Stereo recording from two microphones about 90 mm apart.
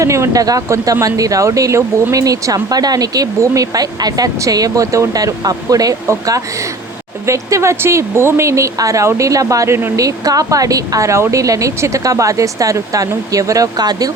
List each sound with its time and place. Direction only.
0.0 s speech: 35° right (ahead or behind)
10.0 s speech: 40° right (ahead or behind)